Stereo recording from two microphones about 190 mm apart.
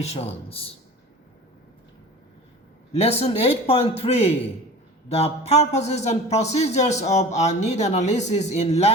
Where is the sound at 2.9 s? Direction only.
35° left (ahead or behind).